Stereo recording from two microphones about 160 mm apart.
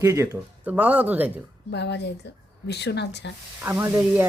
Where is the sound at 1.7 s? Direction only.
90° left.